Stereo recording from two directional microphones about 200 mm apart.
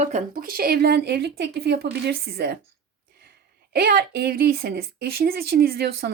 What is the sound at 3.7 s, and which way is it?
Speech, 50° right (ahead or behind).